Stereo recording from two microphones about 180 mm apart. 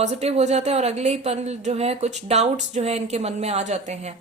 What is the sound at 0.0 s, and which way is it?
Speech, 35° right (ahead or behind).